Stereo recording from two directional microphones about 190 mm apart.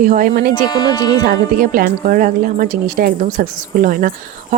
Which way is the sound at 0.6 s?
20° left (ahead or behind).